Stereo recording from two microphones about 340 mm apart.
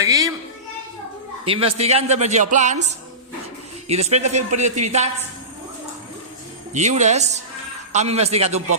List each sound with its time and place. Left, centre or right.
0.0 s a sound: centre
1.5 s a man's voice: centre
3.8 s a man's voice: centre
6.7 s a man's voice: centre